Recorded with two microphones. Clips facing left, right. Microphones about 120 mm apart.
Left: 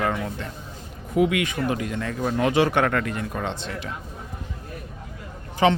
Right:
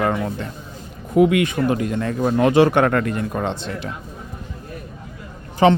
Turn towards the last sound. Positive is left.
turn(degrees=-35)  # may be behind; listen again after turning